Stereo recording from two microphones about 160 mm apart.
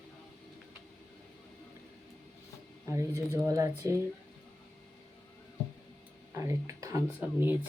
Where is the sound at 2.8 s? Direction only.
20° right (ahead or behind).